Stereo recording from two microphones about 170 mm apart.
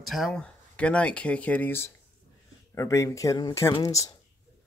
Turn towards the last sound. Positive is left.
turn(degrees=20)  # may be behind; listen again after turning